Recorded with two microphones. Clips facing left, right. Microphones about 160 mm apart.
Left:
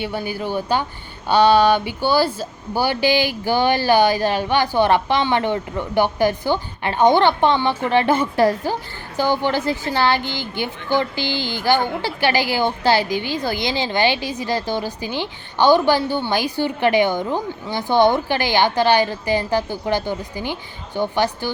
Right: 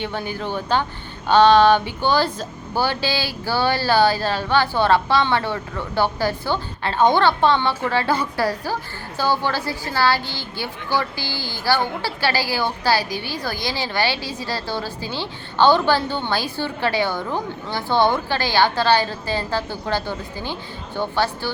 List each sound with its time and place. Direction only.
0.0 s a woman's voice: 10° left (ahead or behind)